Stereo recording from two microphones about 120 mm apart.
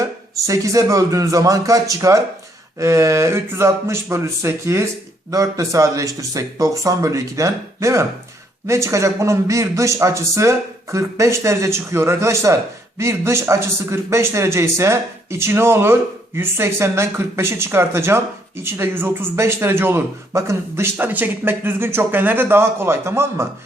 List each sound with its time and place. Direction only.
0.0 s a man's voice: 25° right (ahead or behind)